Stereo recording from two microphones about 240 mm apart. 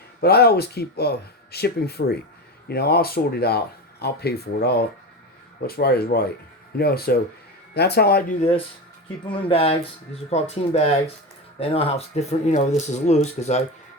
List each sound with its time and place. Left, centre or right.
0.2 s speech: left